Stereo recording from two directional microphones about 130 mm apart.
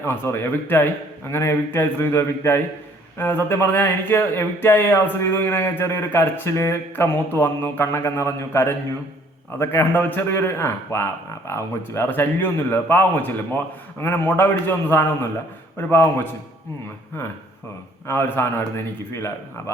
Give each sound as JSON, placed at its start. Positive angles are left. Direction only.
{"t": 0.0, "sound": "a man's voice", "side_deg": 20}
{"t": 18.1, "sound": "speech", "side_deg": 20}